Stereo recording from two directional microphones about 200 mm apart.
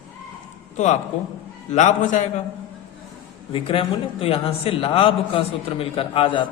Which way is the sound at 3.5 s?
25° left (ahead or behind).